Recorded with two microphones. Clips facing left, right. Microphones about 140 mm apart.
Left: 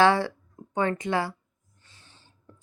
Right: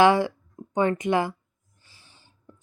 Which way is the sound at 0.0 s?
15° right (ahead or behind).